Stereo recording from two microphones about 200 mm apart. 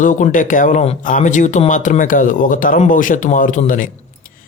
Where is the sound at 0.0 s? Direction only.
40° left (ahead or behind).